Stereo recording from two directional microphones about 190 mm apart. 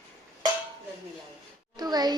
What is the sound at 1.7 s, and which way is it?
Speech, 20° right (ahead or behind).